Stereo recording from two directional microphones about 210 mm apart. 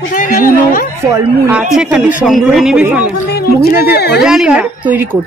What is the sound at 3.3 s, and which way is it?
Speech, 50° left (ahead or behind).